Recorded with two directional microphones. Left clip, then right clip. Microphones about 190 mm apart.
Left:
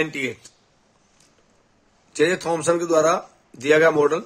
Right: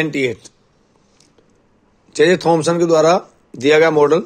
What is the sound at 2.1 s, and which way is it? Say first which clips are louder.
Speech: right 8 dB; 35° right (ahead or behind).